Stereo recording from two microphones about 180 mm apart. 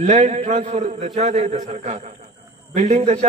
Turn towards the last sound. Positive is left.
turn(degrees=-35)  # may be behind; listen again after turning